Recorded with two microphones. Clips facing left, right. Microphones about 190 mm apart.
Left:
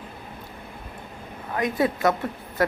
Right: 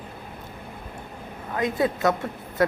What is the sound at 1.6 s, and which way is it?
Speech, 20° right (ahead or behind).